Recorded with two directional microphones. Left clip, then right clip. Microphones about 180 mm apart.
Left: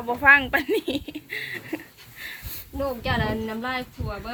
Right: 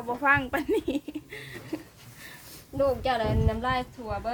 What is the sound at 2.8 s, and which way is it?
Speech, 80° right.